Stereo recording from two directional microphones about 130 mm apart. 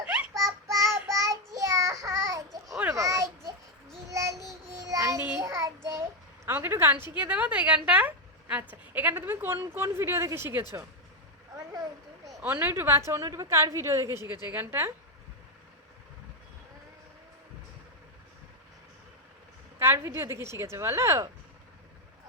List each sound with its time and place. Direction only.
0.0 s child singing: 10° right (ahead or behind)
0.3 s child singing: 25° right (ahead or behind)
2.9 s a sound: 25° right (ahead or behind)
4.1 s child singing: 25° right (ahead or behind)
6.4 s a woman's voice: 15° right (ahead or behind)
12.4 s a woman's voice: 15° right (ahead or behind)
19.8 s a woman's voice: 20° right (ahead or behind)